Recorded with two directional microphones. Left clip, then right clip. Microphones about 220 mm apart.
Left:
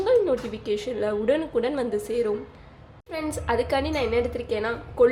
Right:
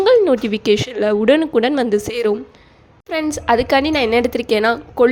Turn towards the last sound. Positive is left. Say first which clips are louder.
# right 7 dB
turn(degrees=-45)  # may be behind; listen again after turning